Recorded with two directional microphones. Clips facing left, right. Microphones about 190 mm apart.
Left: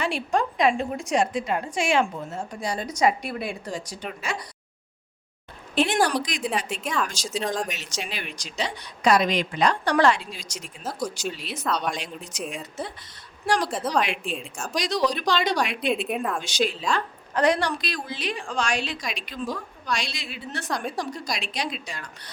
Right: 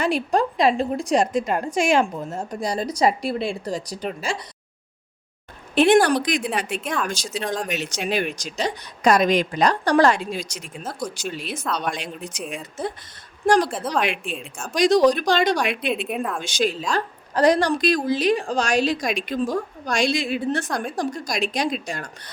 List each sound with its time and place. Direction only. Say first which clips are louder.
0.0 s a woman's voice: right 4 dB; 40° right (ahead or behind)
5.7 s a woman's voice: right 7 dB; 60° right (ahead or behind)
7.3 s a woman's voice: left 1 dB; centre (ahead or behind)
7.7 s a woman's voice: right 9 dB; 55° right (ahead or behind)
13.4 s a woman's voice: right 6 dB; 50° right (ahead or behind)
13.7 s a woman's voice: right 1 dB; centre (ahead or behind)
14.8 s a woman's voice: right 9 dB; 45° right (ahead or behind)
15.9 s a woman's voice: even; centre (ahead or behind)
16.4 s a woman's voice: right 3 dB; 50° right (ahead or behind)
16.9 s a woman's voice: right 2 dB; 35° right (ahead or behind)